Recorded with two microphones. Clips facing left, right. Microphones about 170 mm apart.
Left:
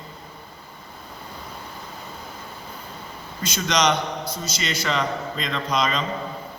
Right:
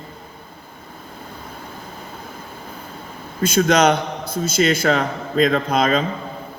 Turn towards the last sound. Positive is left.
turn(degrees=-55)  # may be behind; listen again after turning